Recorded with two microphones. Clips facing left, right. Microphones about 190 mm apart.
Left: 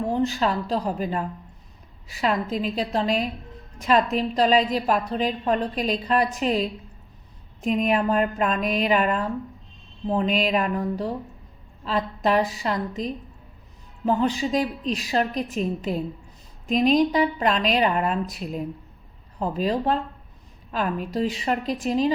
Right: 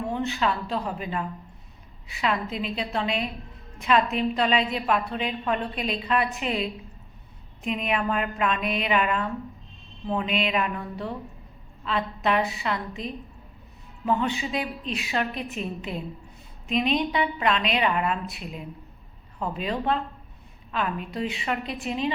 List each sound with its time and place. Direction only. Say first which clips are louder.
0.1 s a woman's voice: left 3 dB; 40° left (ahead or behind)
2.2 s a woman's voice: left 3 dB; 40° left (ahead or behind)